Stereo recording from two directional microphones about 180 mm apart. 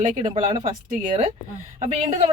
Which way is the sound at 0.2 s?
25° right (ahead or behind).